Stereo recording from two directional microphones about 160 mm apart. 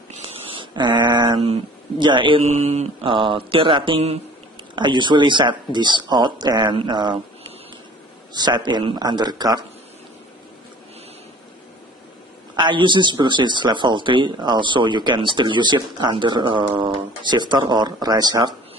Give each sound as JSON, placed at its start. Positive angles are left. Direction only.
{"t": 0.1, "sound": "a sound", "side_deg": -35}
{"t": 1.5, "sound": "speech", "side_deg": -30}
{"t": 2.4, "sound": "speech", "side_deg": -45}
{"t": 3.1, "sound": "speech", "side_deg": -30}
{"t": 8.3, "sound": "speech", "side_deg": -25}
{"t": 12.5, "sound": "speech", "side_deg": -30}